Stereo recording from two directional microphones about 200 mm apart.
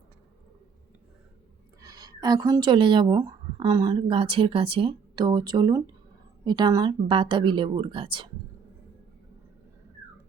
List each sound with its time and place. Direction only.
1.8 s a woman's voice: 20° right (ahead or behind)